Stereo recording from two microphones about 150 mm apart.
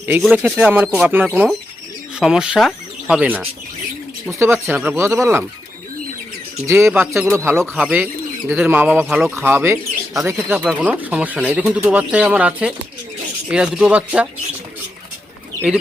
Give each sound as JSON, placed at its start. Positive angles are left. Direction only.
{"t": 0.2, "sound": "speech", "side_deg": -5}
{"t": 6.7, "sound": "speech", "side_deg": -15}